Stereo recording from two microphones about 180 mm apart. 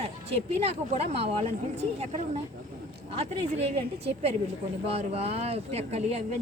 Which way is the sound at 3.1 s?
35° right (ahead or behind).